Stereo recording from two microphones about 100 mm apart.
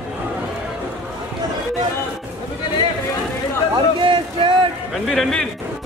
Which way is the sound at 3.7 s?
55° right (ahead or behind).